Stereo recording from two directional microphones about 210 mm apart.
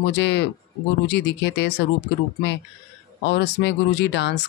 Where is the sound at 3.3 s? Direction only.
55° left (ahead or behind).